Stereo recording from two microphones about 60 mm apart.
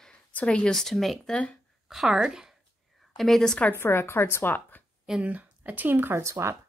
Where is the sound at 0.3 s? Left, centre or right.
Left.